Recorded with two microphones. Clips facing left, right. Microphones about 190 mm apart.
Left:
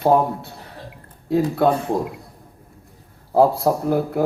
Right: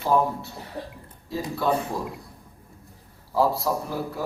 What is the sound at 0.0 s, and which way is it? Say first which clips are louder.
A man's voice: left 5 dB; 55° left (ahead or behind).